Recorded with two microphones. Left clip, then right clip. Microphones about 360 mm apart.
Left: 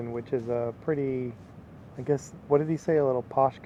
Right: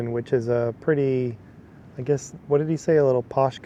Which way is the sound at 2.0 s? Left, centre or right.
Right.